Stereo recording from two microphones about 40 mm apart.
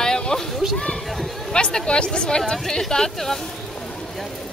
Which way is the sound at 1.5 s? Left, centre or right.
Left.